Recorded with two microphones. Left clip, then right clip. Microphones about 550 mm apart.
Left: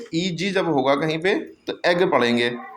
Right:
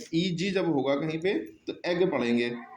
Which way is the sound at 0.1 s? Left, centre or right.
Right.